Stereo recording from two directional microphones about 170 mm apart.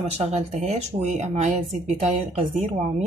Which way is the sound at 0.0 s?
40° right (ahead or behind).